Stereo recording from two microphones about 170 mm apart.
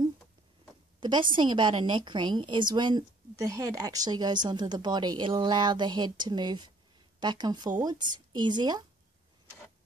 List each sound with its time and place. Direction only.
1.0 s a woman's voice: 25° right (ahead or behind)